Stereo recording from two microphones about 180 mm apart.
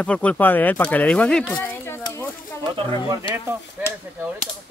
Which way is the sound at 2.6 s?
25° right (ahead or behind).